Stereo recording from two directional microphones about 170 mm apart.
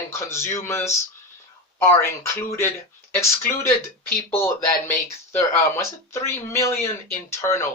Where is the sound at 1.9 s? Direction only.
15° left (ahead or behind).